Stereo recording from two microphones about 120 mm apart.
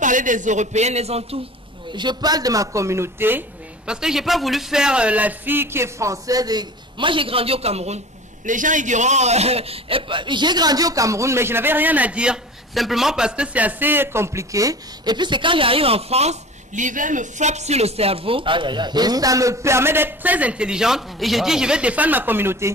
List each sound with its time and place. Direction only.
0.0 s a man's voice: 90° right; by 1.4 s 60° right (ahead or behind)
2.0 s a man's voice: 35° right (ahead or behind); by 8.0 s 65° right (ahead or behind)
8.5 s a man's voice: 90° right; by 22.7 s 20° right (ahead or behind)